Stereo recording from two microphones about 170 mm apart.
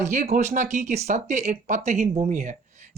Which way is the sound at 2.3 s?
50° right (ahead or behind).